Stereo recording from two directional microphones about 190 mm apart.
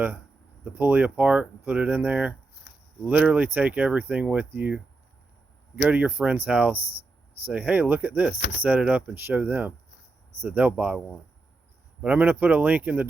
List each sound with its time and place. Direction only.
0.6 s speech: 10° right (ahead or behind)
6.7 s a sound: 30° right (ahead or behind)
7.4 s speech: 10° right (ahead or behind)
12.0 s speech: 10° right (ahead or behind)